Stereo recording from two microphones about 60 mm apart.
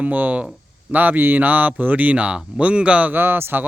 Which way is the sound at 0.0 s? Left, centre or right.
Right.